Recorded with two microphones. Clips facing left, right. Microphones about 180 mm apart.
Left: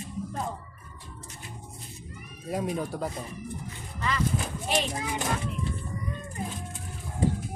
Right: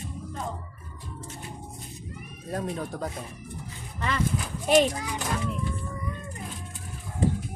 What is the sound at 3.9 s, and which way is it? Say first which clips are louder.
Speech: right 1 dB; 60° right (ahead or behind).